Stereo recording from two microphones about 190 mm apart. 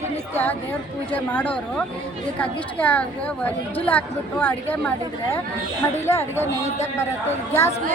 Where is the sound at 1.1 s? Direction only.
10° left (ahead or behind).